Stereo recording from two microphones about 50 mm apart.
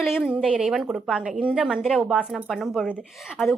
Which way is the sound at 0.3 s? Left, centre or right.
Right.